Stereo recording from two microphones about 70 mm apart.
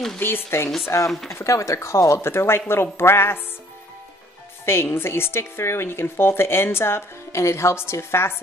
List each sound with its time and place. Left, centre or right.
0.2 s speech: left
0.8 s speech: left
4.6 s speech: left